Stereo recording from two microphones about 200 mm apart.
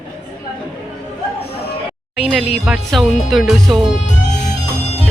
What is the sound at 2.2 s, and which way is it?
Speech, centre (ahead or behind).